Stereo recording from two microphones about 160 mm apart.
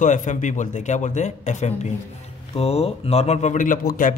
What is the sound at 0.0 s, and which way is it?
Speech, 50° left (ahead or behind).